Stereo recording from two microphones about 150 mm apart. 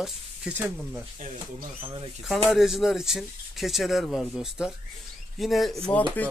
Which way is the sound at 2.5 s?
Centre (ahead or behind).